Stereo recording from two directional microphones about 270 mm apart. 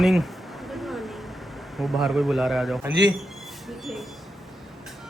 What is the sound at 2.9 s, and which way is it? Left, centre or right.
Speech, right.